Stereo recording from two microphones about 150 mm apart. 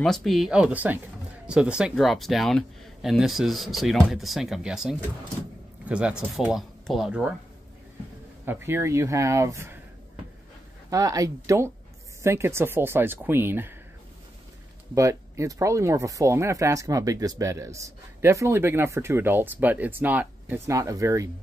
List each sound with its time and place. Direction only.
0.0 s speech: centre (ahead or behind)
8.5 s speech: 15° right (ahead or behind)
10.9 s speech: 25° right (ahead or behind)
15.0 s speech: 20° right (ahead or behind)